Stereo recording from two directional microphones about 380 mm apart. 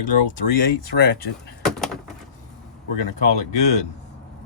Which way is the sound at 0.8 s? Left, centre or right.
Left.